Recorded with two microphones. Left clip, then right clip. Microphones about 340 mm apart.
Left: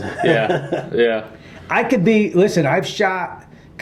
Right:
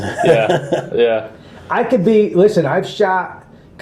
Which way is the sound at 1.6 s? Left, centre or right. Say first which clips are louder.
Right 2 dB; left.